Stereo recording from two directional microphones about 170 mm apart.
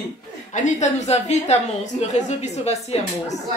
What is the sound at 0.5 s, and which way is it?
A woman's voice, 45° left (ahead or behind).